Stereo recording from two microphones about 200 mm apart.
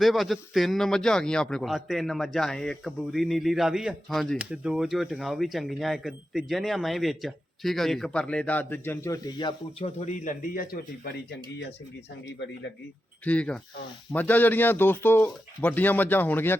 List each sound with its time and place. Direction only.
0.0 s a man's voice: centre (ahead or behind); by 11.3 s 50° left (ahead or behind)
12.3 s speech: 65° left (ahead or behind)
13.2 s a man's voice: 5° left (ahead or behind)